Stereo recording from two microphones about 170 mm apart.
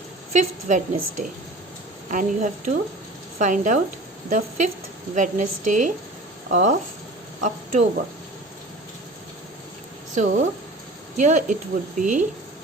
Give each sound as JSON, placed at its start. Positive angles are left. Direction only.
{"t": 0.3, "sound": "a woman's voice", "side_deg": -45}
{"t": 10.2, "sound": "a woman's voice", "side_deg": -45}